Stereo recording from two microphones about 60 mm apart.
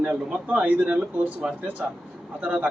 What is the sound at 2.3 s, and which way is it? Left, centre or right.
Speech, right.